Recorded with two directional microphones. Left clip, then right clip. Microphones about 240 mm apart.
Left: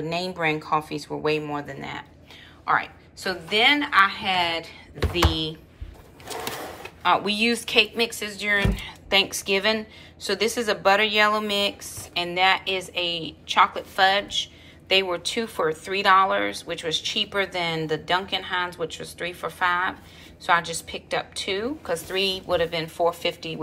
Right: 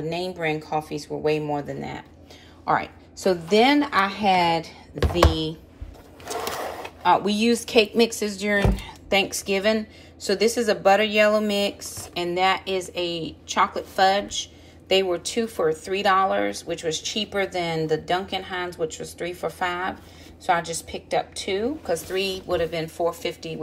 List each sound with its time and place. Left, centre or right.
0.1 s a woman's voice: centre
6.3 s sewing machine: centre
7.0 s speech: centre